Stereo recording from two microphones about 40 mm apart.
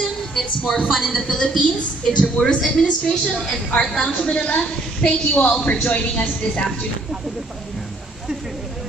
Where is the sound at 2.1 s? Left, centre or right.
Left.